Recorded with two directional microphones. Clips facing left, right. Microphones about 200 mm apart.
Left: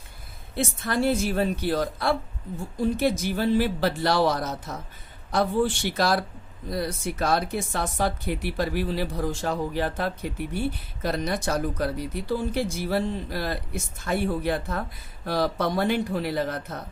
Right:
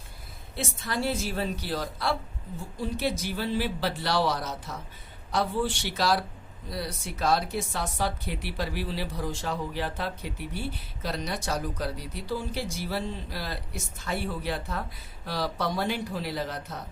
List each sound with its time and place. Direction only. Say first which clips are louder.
0.5 s speech: left 6 dB; 55° left (ahead or behind)